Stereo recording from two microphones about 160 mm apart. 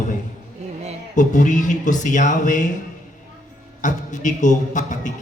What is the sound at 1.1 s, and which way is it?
A man's voice, 50° left (ahead or behind).